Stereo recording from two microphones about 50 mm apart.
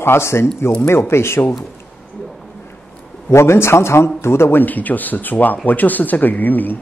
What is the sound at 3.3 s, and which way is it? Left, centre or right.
Speech, left.